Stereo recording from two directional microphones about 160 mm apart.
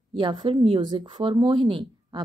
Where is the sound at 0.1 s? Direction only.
30° right (ahead or behind).